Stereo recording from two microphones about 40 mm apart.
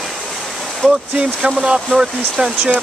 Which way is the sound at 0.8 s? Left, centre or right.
Left.